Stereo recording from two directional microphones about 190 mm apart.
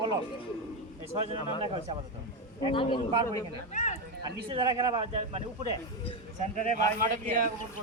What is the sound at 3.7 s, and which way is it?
Speech, 40° left (ahead or behind).